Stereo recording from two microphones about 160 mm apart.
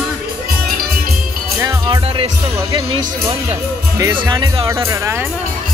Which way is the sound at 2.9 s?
35° right (ahead or behind).